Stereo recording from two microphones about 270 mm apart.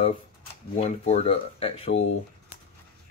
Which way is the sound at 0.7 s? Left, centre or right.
Left.